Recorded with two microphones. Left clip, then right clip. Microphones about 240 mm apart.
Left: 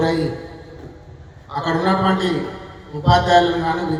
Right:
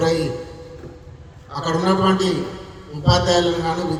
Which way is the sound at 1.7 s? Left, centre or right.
Right.